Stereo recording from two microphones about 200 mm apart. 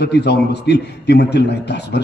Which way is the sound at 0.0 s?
55° left (ahead or behind).